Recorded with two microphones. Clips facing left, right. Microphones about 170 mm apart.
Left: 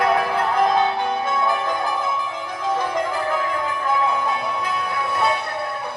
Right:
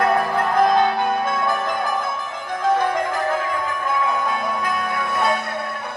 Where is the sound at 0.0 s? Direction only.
45° right (ahead or behind).